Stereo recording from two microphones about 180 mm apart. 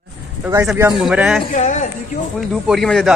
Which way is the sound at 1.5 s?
40° left (ahead or behind).